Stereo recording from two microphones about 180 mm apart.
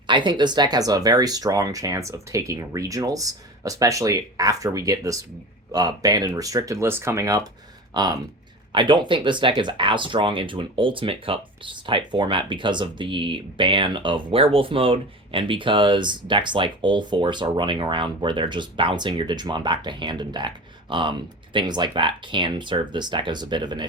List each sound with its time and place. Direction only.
0.1 s speech: 25° right (ahead or behind)